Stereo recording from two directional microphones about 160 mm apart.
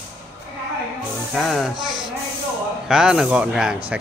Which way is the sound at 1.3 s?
Centre (ahead or behind).